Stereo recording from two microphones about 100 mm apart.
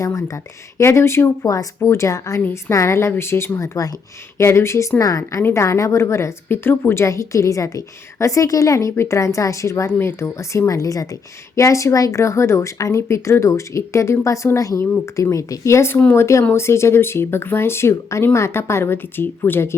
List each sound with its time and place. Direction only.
0.0 s speech: 30° left (ahead or behind)